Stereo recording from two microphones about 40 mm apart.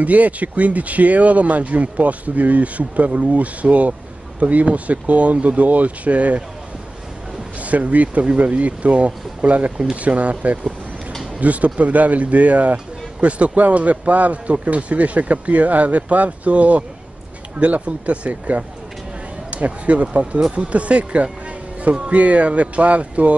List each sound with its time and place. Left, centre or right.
0.0 s speech: right
7.6 s speech: right
12.7 s music: right
13.6 s speech: right